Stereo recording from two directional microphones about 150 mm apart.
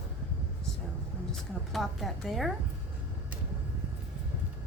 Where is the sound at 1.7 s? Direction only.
Centre (ahead or behind).